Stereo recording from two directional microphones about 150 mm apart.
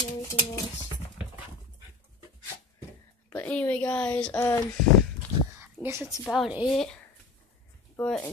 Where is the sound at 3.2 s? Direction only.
10° left (ahead or behind).